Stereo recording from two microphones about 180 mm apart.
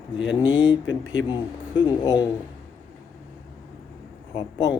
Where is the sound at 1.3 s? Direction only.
25° left (ahead or behind).